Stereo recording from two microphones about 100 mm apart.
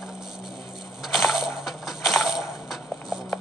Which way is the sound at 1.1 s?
5° right (ahead or behind).